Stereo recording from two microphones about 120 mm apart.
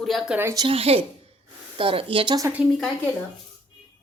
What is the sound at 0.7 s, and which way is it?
A woman's voice, 55° right (ahead or behind).